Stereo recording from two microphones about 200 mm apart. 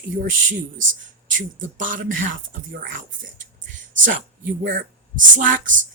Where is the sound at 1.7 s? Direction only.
40° right (ahead or behind).